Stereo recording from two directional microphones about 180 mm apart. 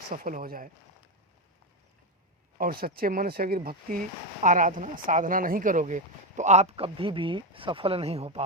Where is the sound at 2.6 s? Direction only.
55° right (ahead or behind).